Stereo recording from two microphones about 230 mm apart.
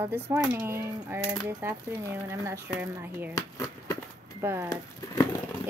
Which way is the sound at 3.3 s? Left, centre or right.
Centre.